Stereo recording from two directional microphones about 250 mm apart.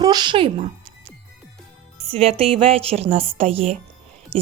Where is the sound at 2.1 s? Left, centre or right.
Right.